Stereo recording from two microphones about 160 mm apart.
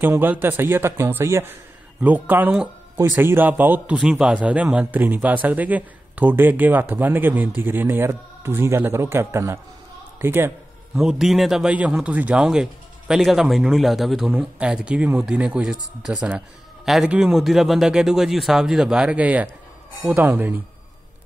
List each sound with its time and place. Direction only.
0.0 s a man's voice: 10° right (ahead or behind)
11.0 s a man's voice: 5° right (ahead or behind)